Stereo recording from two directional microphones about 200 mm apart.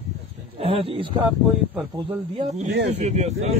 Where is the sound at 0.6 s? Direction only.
30° right (ahead or behind).